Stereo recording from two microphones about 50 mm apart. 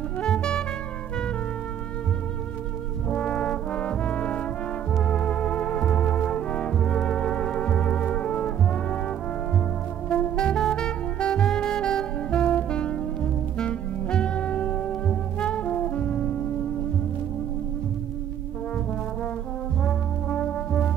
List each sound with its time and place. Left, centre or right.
0.2 s music: centre
3.1 s brass instrument: left
5.0 s organ: left
10.0 s saxophone: centre
15.3 s music: left
19.8 s brass instrument: left